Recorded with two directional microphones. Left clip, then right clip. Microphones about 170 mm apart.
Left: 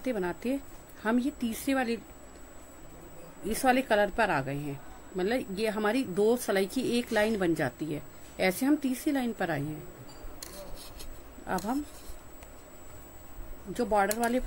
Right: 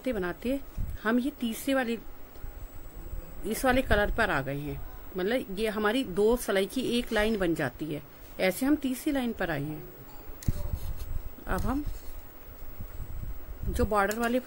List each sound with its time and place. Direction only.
0.0 s speech: 15° right (ahead or behind)
3.4 s speech: 10° right (ahead or behind)
13.7 s speech: 20° right (ahead or behind)